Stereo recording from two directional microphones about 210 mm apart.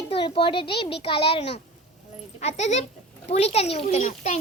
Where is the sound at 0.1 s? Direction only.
25° left (ahead or behind).